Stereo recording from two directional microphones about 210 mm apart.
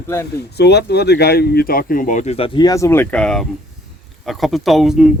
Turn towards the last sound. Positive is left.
turn(degrees=0)  # may be behind; listen again after turning